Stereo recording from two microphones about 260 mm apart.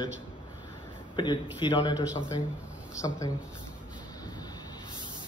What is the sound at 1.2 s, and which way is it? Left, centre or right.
A man's voice, centre.